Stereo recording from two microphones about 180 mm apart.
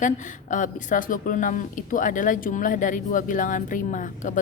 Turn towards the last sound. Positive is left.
turn(degrees=45)  # may be behind; listen again after turning